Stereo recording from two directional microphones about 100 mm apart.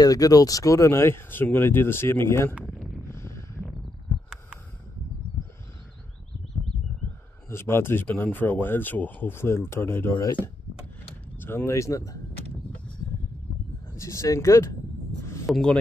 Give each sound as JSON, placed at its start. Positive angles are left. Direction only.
{"t": 0.0, "sound": "speech", "side_deg": 35}
{"t": 3.1, "sound": "a sound", "side_deg": 25}
{"t": 7.4, "sound": "speech", "side_deg": 25}
{"t": 11.3, "sound": "speech", "side_deg": 20}
{"t": 13.9, "sound": "speech", "side_deg": 30}
{"t": 15.5, "sound": "speech", "side_deg": 0}